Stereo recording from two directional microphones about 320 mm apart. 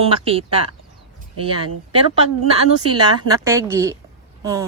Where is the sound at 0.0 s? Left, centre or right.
Centre.